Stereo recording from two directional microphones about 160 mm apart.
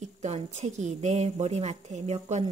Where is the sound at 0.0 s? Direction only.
45° right (ahead or behind).